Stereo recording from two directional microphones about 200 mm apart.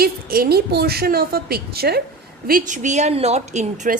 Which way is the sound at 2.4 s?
40° right (ahead or behind).